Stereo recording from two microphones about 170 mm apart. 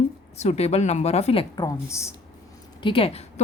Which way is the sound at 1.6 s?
15° left (ahead or behind).